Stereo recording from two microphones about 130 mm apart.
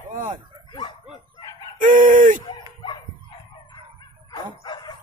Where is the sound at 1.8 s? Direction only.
85° right.